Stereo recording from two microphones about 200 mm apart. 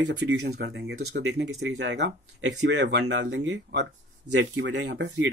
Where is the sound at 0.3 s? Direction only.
55° right (ahead or behind).